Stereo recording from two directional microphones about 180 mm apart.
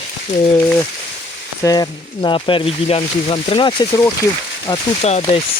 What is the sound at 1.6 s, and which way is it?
Speech, 20° left (ahead or behind).